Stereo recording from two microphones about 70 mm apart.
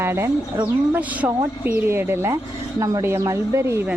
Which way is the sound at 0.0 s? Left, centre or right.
Right.